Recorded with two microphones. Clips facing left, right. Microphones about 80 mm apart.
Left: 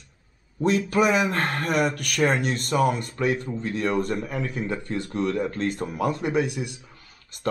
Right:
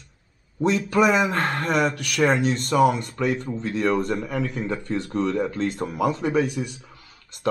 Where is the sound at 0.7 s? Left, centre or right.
Centre.